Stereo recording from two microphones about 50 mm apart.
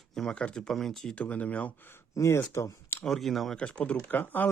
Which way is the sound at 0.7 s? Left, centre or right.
Centre.